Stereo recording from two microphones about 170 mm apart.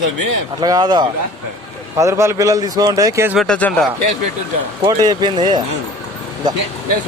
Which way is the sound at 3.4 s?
5° left (ahead or behind).